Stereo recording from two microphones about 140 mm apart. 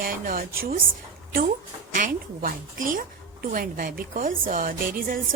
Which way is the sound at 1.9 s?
75° right (ahead or behind).